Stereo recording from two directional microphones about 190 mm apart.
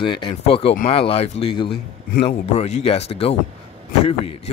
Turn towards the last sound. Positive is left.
turn(degrees=30)  # may be behind; listen again after turning